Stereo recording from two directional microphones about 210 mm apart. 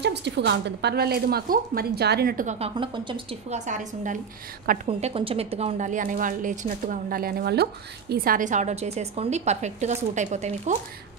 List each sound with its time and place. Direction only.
0.0 s a woman's voice: 55° right (ahead or behind)
2.7 s a woman's voice: 25° right (ahead or behind)